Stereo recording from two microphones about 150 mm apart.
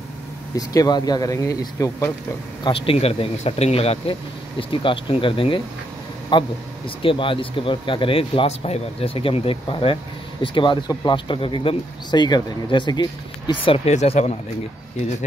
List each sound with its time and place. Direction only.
0.6 s speech: 25° left (ahead or behind)
2.6 s speech: 35° left (ahead or behind)
13.7 s speech: 45° left (ahead or behind)